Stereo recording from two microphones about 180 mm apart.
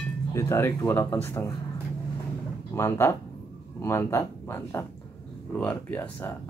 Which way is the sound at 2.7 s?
15° left (ahead or behind).